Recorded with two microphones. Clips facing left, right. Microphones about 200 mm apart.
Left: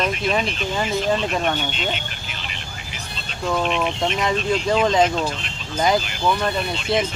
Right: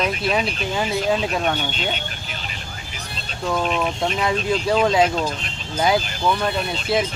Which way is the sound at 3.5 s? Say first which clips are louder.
Even; centre (ahead or behind).